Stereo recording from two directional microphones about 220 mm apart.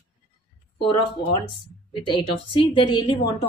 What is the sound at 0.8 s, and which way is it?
A woman's voice, 20° left (ahead or behind).